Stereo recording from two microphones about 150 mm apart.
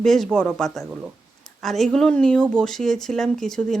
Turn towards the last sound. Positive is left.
turn(degrees=5)  # may be behind; listen again after turning